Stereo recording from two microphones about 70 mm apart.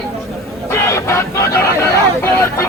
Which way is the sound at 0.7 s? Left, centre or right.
Left.